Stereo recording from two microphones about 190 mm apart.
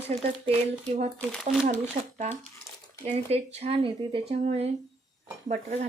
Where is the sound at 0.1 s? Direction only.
35° right (ahead or behind).